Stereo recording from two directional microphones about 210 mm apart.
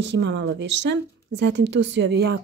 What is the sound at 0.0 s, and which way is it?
Speech, 55° right (ahead or behind).